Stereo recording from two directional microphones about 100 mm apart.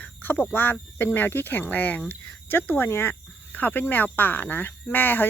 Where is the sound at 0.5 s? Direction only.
20° left (ahead or behind).